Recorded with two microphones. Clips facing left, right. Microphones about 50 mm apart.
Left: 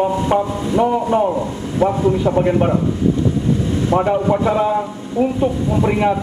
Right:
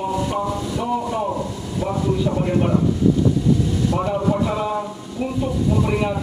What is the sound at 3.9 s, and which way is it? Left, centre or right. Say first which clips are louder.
Speech: left 7 dB; left.